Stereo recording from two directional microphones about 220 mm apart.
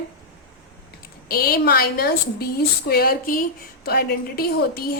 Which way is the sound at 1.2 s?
45° left (ahead or behind).